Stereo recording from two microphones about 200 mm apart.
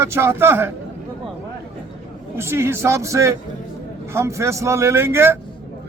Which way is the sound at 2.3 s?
10° right (ahead or behind).